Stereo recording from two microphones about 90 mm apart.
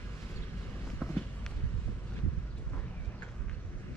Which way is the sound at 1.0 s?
10° left (ahead or behind).